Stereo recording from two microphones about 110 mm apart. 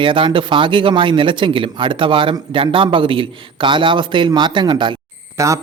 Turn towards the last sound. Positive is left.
turn(degrees=-30)  # may be behind; listen again after turning